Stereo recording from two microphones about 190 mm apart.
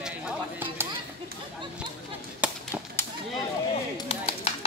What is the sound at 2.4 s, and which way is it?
Tap, 5° right (ahead or behind).